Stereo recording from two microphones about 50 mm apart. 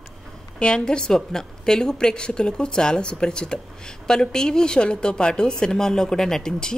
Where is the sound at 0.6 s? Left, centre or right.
Centre.